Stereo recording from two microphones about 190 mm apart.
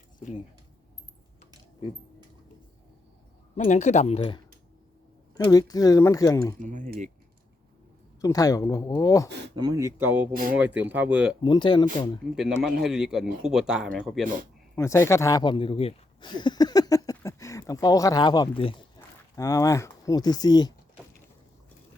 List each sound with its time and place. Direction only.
3.5 s speech: 40° left (ahead or behind)
5.5 s speech: 20° left (ahead or behind)
6.6 s speech: 40° right (ahead or behind)
8.2 s speech: 20° left (ahead or behind)
9.6 s speech: 20° right (ahead or behind)
11.4 s speech: 25° left (ahead or behind)
12.3 s speech: 5° right (ahead or behind)
14.8 s speech: 15° left (ahead or behind)